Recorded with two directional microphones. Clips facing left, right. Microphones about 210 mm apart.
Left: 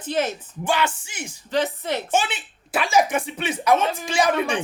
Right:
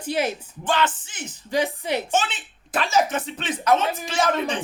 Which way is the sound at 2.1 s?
10° left (ahead or behind).